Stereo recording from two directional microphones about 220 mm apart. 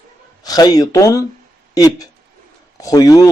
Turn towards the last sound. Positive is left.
turn(degrees=15)  # may be behind; listen again after turning